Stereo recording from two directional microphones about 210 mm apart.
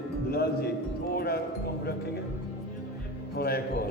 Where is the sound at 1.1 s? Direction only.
45° left (ahead or behind).